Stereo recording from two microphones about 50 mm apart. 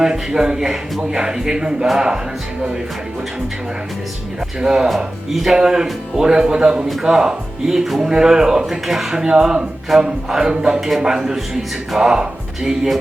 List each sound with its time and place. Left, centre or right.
0.0 s speech: centre
4.6 s speech: centre